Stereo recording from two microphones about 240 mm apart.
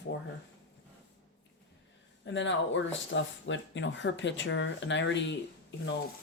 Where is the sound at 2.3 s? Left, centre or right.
Left.